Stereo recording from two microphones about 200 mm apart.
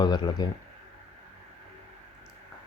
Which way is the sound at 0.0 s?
20° left (ahead or behind).